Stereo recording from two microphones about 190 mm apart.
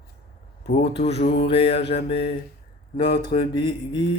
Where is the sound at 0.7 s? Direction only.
35° left (ahead or behind).